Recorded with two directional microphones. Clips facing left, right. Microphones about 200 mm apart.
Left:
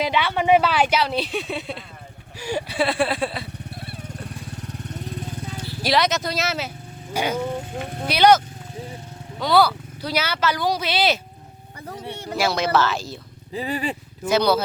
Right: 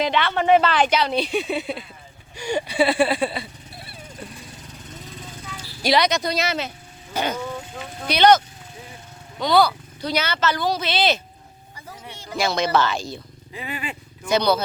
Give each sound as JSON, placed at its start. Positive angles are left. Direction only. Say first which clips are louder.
{"t": 0.0, "sound": "speech", "louder": "right 1 dB", "side_deg": 10}
{"t": 4.4, "sound": "vehicle", "louder": "left 6 dB", "side_deg": 60}
{"t": 5.8, "sound": "speech", "louder": "right 1 dB", "side_deg": 0}
{"t": 9.4, "sound": "speech", "louder": "even", "side_deg": 5}
{"t": 12.1, "sound": "speech", "louder": "left 2 dB", "side_deg": 60}
{"t": 12.4, "sound": "speech", "louder": "even", "side_deg": 5}
{"t": 13.5, "sound": "speech", "louder": "left 6 dB", "side_deg": 35}
{"t": 14.3, "sound": "speech", "louder": "left 1 dB", "side_deg": 5}